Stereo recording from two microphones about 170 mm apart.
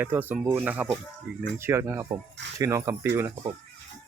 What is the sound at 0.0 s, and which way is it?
Speech, 10° right (ahead or behind).